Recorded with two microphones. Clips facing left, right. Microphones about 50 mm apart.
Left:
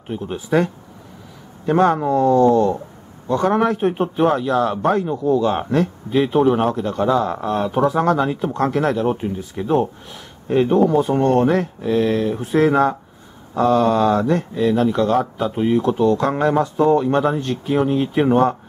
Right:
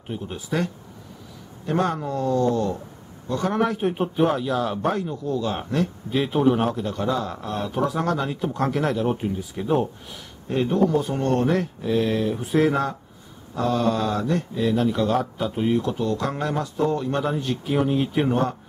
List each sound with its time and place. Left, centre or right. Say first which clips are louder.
0.3 s speech: left 8 dB; left
1.7 s a man's voice: left 8 dB; left; by 5.0 s centre
5.0 s speech: left 8 dB; left
6.1 s speech: left 5 dB; centre; by 7.8 s left
7.8 s speech: left 6 dB; centre
8.5 s a man's voice: left 4 dB; centre
10.5 s speech: left 6 dB; left
11.6 s a man's voice: left 4 dB; centre
13.6 s speech: left 7 dB; centre
14.6 s speech: left 4 dB; centre
15.8 s speech: left 8 dB; left
17.4 s a man's voice: left 4 dB; centre